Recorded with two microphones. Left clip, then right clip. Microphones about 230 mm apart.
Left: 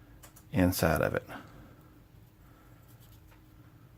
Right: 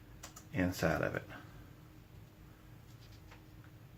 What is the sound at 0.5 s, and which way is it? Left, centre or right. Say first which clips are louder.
Speech: left 7 dB; left.